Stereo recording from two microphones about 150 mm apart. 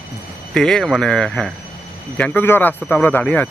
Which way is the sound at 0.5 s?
5° left (ahead or behind).